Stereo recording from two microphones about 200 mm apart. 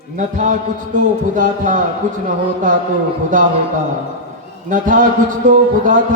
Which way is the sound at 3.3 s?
40° right (ahead or behind).